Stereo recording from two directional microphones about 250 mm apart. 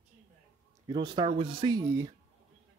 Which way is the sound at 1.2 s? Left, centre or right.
Centre.